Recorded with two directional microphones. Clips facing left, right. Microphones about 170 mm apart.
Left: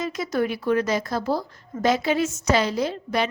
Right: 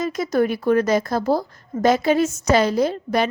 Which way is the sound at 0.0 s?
45° right (ahead or behind).